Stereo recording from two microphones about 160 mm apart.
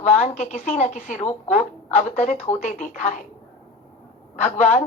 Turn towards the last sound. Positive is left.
turn(degrees=50)  # may be behind; listen again after turning